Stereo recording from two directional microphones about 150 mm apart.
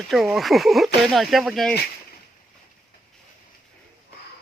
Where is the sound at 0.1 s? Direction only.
Centre (ahead or behind).